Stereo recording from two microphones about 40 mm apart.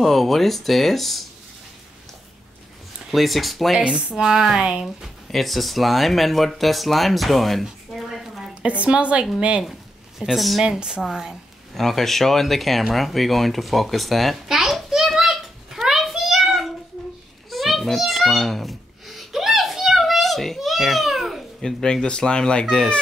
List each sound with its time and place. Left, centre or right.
0.0 s speech: centre
3.1 s speech: centre
4.1 s speech: centre
5.0 s speech: centre
7.6 s a sound: centre
8.6 s a woman's voice: right
9.6 s speech: centre
10.6 s speech: centre
11.7 s speech: centre
14.5 s a sound: centre
20.0 s babbling: centre
21.5 s speech: centre
22.0 s speech: left